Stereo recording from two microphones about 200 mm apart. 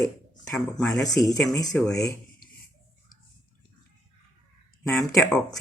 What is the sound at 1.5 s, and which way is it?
Speech, 20° left (ahead or behind).